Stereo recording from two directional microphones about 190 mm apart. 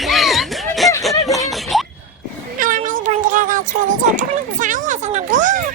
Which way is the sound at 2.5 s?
45° right (ahead or behind).